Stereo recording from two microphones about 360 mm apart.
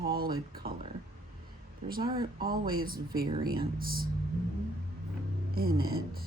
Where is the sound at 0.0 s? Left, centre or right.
Right.